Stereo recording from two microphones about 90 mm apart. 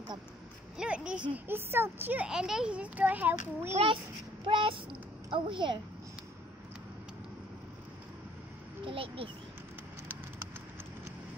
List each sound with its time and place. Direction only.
0.7 s a child's voice: 10° right (ahead or behind)
1.3 s speech: 25° right (ahead or behind)
2.2 s a child's voice: 5° right (ahead or behind)
4.5 s a child's voice: 75° right (ahead or behind)
8.8 s a child's voice: 80° right